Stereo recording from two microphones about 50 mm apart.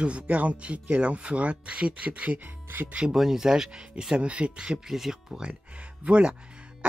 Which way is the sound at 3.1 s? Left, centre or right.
Centre.